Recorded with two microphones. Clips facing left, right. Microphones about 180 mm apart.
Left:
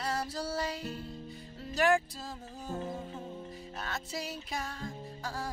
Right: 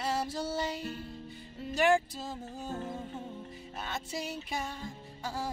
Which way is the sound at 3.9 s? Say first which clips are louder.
Right 2 dB; 25° right (ahead or behind).